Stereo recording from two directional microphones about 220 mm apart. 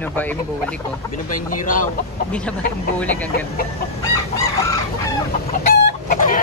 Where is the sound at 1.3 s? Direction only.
35° left (ahead or behind).